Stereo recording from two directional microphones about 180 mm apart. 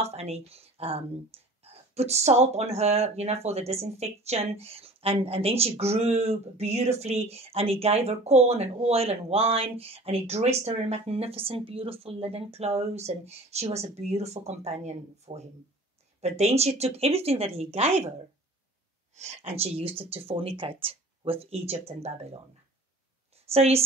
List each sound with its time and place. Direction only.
0.0 s speech: 35° right (ahead or behind)
19.1 s speech: 35° right (ahead or behind)
23.5 s speech: 35° right (ahead or behind)